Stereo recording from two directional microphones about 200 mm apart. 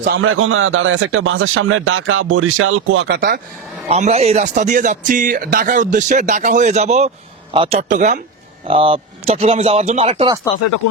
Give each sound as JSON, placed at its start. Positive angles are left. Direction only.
{"t": 0.2, "sound": "a man's voice", "side_deg": -90}
{"t": 3.1, "sound": "speech", "side_deg": -50}
{"t": 3.8, "sound": "a man's voice", "side_deg": -30}
{"t": 8.6, "sound": "speech", "side_deg": -25}